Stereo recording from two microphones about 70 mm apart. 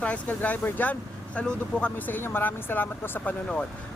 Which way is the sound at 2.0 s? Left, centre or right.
Left.